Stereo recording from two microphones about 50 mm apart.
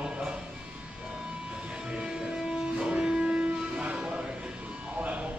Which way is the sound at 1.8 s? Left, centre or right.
Centre.